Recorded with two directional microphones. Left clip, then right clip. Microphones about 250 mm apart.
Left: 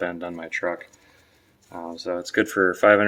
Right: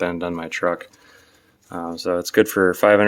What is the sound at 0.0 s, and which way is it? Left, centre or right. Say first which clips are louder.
Speech: right 5 dB; right.